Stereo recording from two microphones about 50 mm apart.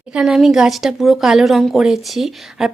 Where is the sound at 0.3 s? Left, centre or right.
Centre.